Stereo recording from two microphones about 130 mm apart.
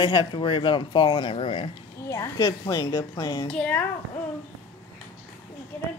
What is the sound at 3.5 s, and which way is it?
Speech, 10° left (ahead or behind).